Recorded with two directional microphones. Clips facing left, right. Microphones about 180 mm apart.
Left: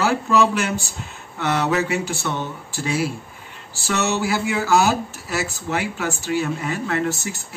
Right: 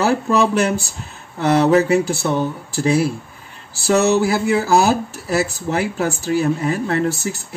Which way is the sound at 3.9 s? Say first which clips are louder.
Right 7 dB; 35° right (ahead or behind).